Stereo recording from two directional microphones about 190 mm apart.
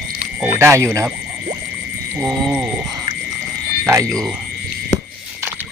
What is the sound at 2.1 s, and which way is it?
Speech, 5° right (ahead or behind).